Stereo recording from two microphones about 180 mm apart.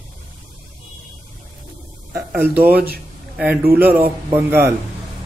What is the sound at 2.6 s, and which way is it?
A man's voice, 10° right (ahead or behind).